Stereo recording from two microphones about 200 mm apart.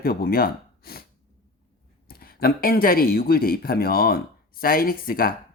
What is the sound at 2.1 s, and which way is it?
Speech, 50° left (ahead or behind).